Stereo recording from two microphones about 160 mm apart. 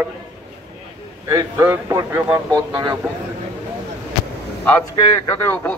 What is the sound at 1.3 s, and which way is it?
A man's voice, 20° right (ahead or behind).